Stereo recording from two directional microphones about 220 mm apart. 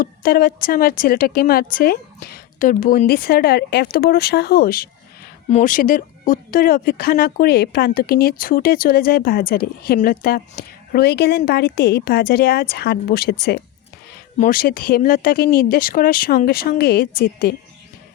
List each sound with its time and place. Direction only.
0.0 s speech: 40° left (ahead or behind)